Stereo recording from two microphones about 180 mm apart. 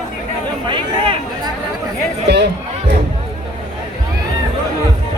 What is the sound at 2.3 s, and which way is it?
Speech, 70° right (ahead or behind).